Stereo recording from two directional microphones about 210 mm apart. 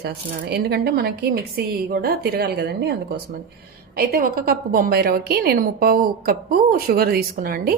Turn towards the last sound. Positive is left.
turn(degrees=-45)  # may be behind; listen again after turning